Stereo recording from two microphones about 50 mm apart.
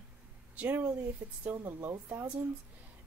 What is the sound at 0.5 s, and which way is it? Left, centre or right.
Speech, right.